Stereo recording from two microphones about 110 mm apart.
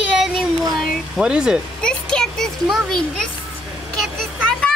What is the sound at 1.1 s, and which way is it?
Speech, 5° right (ahead or behind).